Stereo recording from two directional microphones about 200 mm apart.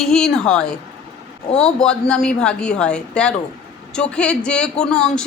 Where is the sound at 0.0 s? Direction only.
Centre (ahead or behind).